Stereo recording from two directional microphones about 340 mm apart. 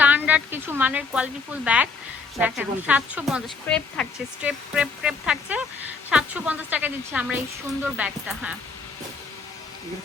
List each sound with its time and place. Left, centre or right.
0.0 s speech: centre